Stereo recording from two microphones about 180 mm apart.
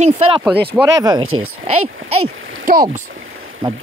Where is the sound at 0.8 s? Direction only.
20° right (ahead or behind).